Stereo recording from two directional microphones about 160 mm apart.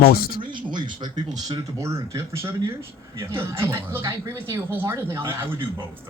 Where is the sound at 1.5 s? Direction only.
20° right (ahead or behind).